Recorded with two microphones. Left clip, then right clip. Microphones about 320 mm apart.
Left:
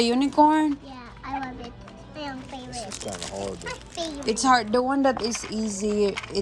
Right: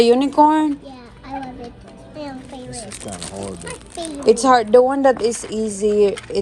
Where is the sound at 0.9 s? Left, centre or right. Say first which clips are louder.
Right 2 dB; centre.